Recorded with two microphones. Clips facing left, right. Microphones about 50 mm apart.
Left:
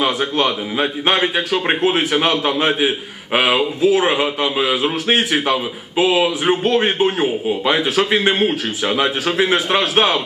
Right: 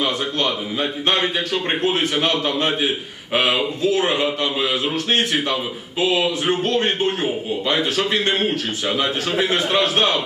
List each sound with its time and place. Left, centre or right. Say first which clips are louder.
0.0 s a man's voice: left 4 dB; centre